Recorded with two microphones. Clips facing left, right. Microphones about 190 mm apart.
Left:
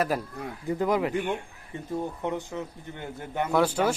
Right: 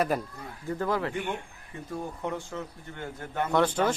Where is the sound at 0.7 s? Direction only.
15° left (ahead or behind).